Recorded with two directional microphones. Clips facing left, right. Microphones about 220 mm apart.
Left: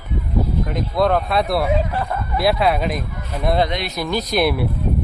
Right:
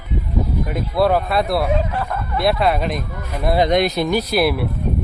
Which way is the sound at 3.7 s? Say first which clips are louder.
Right 9 dB; 50° right (ahead or behind).